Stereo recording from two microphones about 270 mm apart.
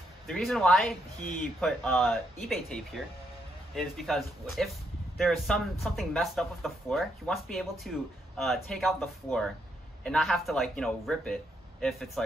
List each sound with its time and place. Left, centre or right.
0.3 s speech: centre